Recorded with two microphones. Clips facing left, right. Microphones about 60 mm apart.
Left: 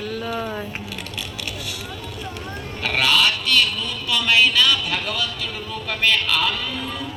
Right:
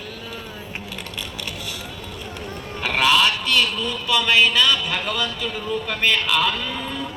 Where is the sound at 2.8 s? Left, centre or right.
Centre.